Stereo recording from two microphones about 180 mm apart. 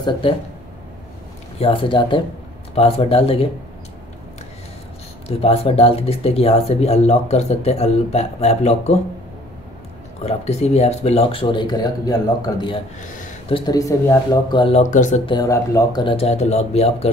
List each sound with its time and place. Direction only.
1.6 s speech: 30° left (ahead or behind)
5.3 s speech: 35° left (ahead or behind)
10.2 s speech: 35° left (ahead or behind)
13.0 s a sound: 45° left (ahead or behind)
13.5 s speech: 25° left (ahead or behind)
14.8 s speech: 45° left (ahead or behind)
15.2 s speech: 20° left (ahead or behind)